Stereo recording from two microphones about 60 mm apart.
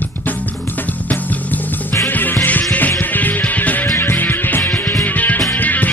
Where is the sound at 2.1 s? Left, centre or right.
Left.